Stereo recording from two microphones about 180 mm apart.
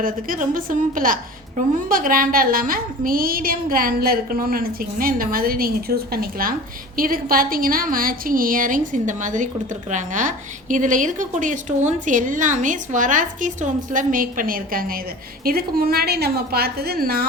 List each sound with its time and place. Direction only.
0.0 s a woman's voice: 50° right (ahead or behind)